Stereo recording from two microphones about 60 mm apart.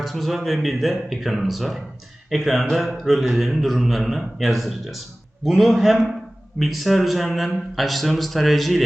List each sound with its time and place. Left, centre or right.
0.0 s a man's voice: centre